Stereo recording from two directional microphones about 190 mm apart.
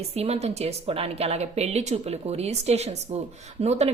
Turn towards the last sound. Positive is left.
turn(degrees=-35)  # may be behind; listen again after turning